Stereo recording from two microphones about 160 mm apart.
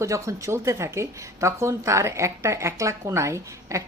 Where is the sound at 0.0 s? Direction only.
20° right (ahead or behind).